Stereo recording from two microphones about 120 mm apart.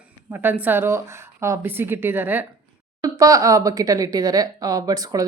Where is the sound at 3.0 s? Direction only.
30° right (ahead or behind).